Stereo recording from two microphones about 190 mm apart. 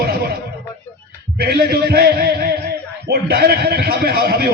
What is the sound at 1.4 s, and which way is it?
A man's voice, 55° right (ahead or behind).